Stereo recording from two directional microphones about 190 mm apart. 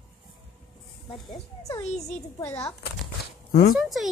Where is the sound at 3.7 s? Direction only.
Centre (ahead or behind).